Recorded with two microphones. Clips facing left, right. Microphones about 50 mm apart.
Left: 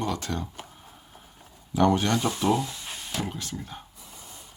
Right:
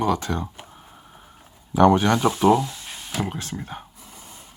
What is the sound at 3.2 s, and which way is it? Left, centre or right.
Speech, right.